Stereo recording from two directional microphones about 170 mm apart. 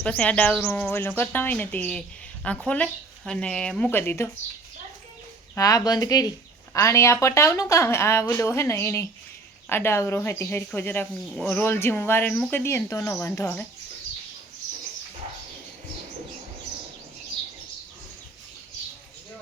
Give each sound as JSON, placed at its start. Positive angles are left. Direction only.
{"t": 0.0, "sound": "speech", "side_deg": 5}
{"t": 5.5, "sound": "speech", "side_deg": 20}